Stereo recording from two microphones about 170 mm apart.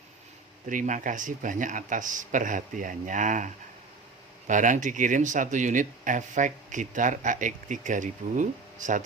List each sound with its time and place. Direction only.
0.7 s speech: 50° right (ahead or behind)